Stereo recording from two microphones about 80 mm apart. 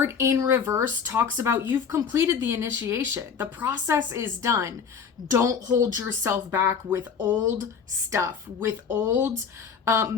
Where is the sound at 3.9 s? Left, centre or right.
Right.